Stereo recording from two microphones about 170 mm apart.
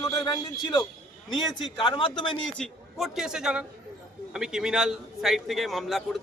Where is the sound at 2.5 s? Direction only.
Centre (ahead or behind).